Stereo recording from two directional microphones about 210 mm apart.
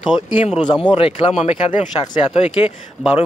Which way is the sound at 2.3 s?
30° left (ahead or behind).